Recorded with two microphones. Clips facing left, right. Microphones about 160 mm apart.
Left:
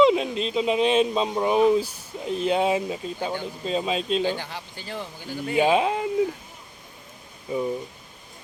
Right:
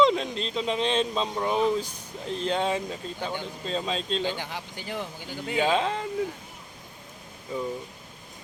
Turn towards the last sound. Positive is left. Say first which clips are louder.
# left 5 dB
turn(degrees=10)  # may be behind; listen again after turning